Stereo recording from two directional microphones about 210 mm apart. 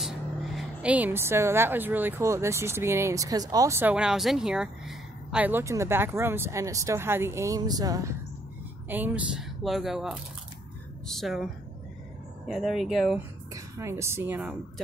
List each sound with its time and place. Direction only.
0.6 s speech: 5° right (ahead or behind)
12.4 s speech: centre (ahead or behind)
13.5 s speech: 15° right (ahead or behind)